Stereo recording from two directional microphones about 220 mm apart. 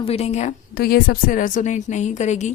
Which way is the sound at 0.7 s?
45° left (ahead or behind).